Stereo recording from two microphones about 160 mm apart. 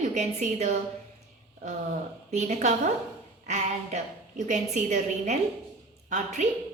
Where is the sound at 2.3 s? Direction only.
45° right (ahead or behind).